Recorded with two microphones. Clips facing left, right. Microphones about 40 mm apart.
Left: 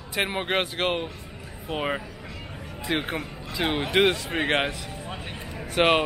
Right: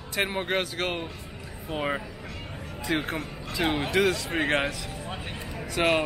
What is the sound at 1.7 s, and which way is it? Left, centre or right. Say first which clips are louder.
Speech: left 1 dB; left.